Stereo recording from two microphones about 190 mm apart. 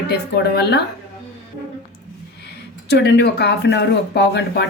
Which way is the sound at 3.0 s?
60° left (ahead or behind).